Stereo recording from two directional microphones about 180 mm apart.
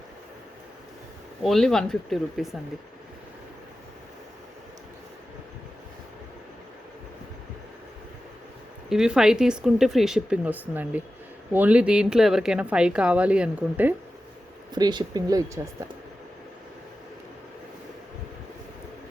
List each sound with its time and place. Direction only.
1.4 s speech: centre (ahead or behind)
8.9 s speech: 5° right (ahead or behind)
14.8 s speech: 25° right (ahead or behind)